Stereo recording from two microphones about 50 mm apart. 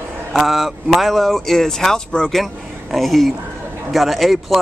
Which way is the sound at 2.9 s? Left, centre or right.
Centre.